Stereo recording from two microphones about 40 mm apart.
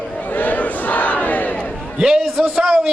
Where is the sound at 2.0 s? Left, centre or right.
Centre.